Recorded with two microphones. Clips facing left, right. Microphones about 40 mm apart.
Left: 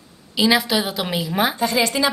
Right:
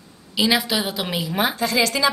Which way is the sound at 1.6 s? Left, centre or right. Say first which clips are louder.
Left 1 dB; left.